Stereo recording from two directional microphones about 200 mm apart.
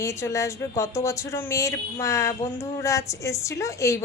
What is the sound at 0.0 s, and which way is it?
Speech, 15° left (ahead or behind).